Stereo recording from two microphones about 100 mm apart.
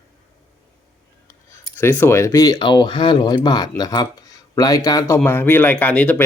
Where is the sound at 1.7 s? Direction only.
20° left (ahead or behind).